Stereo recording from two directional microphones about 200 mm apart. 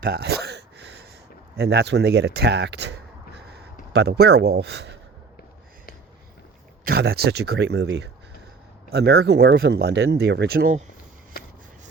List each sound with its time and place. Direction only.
0.0 s gasp: 50° right (ahead or behind)
1.5 s speech: 55° right (ahead or behind)
6.8 s speech: 50° right (ahead or behind)